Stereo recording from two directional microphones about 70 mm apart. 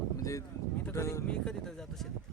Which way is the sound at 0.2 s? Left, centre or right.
Left.